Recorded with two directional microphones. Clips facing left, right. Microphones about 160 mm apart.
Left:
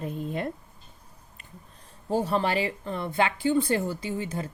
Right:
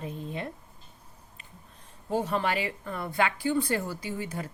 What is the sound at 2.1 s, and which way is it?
Speech, 35° left (ahead or behind).